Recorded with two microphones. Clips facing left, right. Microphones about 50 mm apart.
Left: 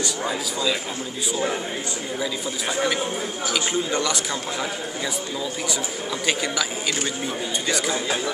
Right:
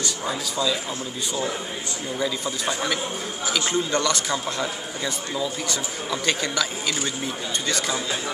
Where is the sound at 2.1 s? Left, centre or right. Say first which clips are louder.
Right 2 dB; centre.